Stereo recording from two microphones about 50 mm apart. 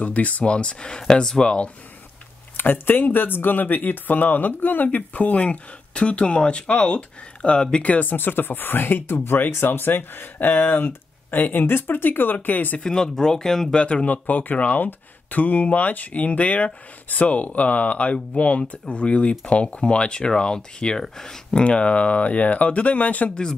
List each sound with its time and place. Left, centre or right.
0.0 s speech: left
2.5 s speech: left
12.7 s speech: centre
13.7 s speech: left
21.5 s speech: left